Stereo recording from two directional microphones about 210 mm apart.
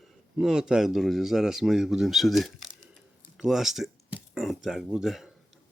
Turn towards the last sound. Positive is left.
turn(degrees=0)  # may be behind; listen again after turning